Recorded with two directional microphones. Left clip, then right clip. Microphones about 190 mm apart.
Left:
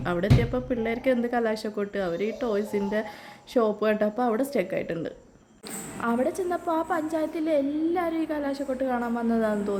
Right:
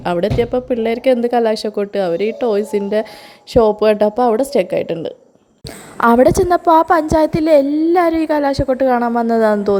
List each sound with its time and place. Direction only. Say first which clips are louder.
0.0 s a woman's voice: right 10 dB; 35° right (ahead or behind)
6.0 s a woman's voice: right 16 dB; 45° right (ahead or behind)